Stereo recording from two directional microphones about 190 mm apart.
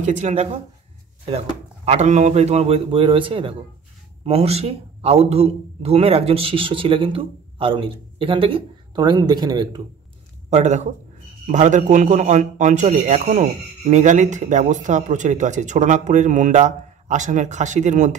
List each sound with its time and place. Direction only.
0.0 s a man's voice: 35° right (ahead or behind)
1.9 s a man's voice: 35° right (ahead or behind); by 9.8 s 20° right (ahead or behind)
10.5 s a man's voice: 40° right (ahead or behind)